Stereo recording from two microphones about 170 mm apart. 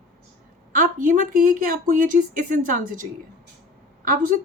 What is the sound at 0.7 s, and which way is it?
Speech, 55° right (ahead or behind).